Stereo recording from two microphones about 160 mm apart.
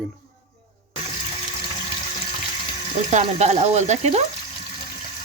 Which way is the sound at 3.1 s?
45° right (ahead or behind).